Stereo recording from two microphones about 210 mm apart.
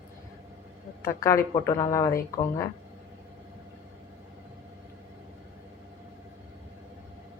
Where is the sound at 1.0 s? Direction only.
15° left (ahead or behind).